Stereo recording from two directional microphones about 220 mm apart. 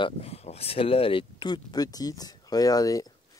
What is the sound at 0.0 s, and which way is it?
Speech, 25° left (ahead or behind).